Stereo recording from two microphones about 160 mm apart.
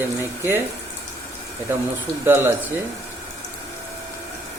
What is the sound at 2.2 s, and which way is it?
Speech, 15° right (ahead or behind).